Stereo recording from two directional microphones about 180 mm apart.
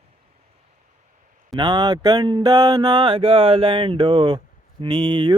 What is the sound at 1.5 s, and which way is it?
Speech, 25° right (ahead or behind).